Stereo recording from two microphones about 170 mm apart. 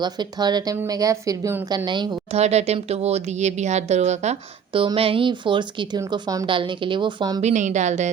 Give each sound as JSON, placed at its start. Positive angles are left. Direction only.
{"t": 0.0, "sound": "a woman's voice", "side_deg": -25}
{"t": 2.4, "sound": "speech", "side_deg": -40}
{"t": 7.4, "sound": "a woman's voice", "side_deg": -45}